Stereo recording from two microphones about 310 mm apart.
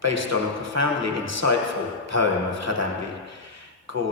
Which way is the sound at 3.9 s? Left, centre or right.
Right.